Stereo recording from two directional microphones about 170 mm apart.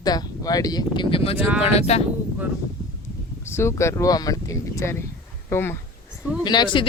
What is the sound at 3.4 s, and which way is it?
Speech, 15° left (ahead or behind).